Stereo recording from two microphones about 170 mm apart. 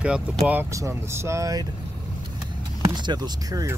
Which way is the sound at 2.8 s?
25° right (ahead or behind).